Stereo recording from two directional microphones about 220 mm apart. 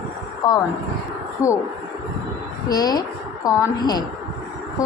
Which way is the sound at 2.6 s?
15° left (ahead or behind).